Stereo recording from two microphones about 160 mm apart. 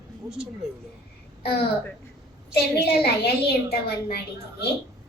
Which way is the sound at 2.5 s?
80° left.